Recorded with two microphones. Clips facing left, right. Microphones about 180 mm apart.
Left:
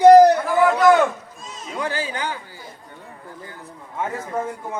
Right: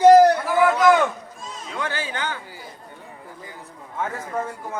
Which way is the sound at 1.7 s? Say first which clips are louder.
Left 3 dB; 30° left (ahead or behind).